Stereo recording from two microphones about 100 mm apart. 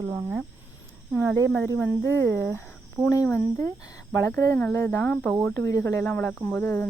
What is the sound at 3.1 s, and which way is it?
Speech, 30° left (ahead or behind).